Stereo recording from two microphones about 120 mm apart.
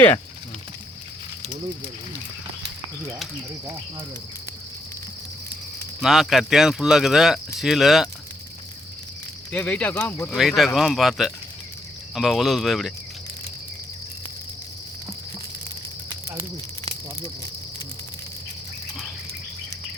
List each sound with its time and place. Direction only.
6.0 s speech: centre (ahead or behind)
9.5 s speech: 10° left (ahead or behind)
10.3 s speech: centre (ahead or behind)